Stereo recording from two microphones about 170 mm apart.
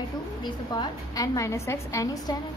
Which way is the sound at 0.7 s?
20° left (ahead or behind).